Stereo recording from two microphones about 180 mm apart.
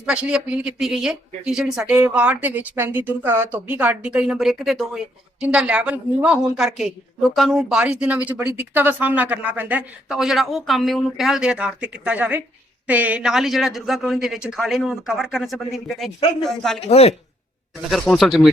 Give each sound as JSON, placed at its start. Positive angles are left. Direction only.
{"t": 0.0, "sound": "speech", "side_deg": -5}
{"t": 16.8, "sound": "speech", "side_deg": 35}
{"t": 17.9, "sound": "speech", "side_deg": 0}